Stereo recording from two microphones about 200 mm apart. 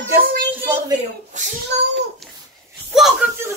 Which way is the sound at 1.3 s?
35° right (ahead or behind).